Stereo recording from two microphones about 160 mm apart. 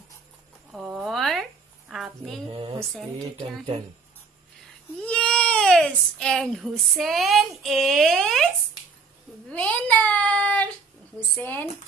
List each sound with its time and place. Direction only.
0.7 s a sound: 5° right (ahead or behind)
5.0 s speech: 5° left (ahead or behind)
9.5 s child singing: 10° left (ahead or behind)
11.3 s speech: 10° left (ahead or behind)